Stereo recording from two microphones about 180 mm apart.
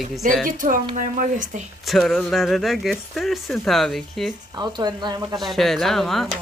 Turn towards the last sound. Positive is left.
turn(degrees=0)  # may be behind; listen again after turning